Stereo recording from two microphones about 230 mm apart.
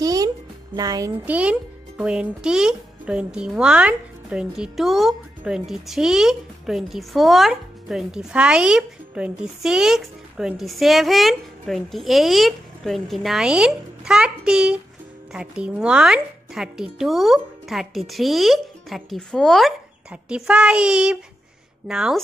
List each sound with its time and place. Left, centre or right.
0.0 s music: centre
0.7 s a child's voice: centre